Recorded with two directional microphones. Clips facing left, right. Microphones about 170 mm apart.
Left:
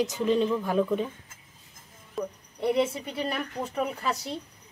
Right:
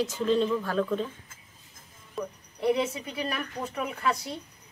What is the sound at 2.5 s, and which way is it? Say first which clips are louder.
Speech: left 1 dB; 25° left (ahead or behind).